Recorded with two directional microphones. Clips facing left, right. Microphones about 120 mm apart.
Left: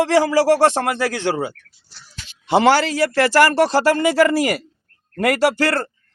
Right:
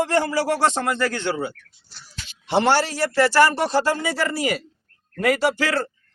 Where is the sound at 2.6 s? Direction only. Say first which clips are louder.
Left 4 dB; 90° left.